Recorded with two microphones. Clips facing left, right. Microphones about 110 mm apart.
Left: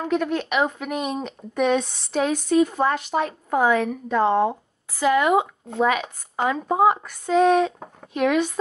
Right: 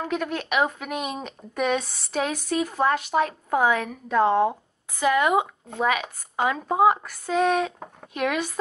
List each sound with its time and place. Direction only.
0.0 s speech: 5° right (ahead or behind)
5.0 s speech: 20° left (ahead or behind)
5.8 s speech: 5° right (ahead or behind)